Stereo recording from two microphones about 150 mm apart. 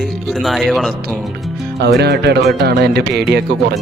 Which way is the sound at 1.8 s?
90° right.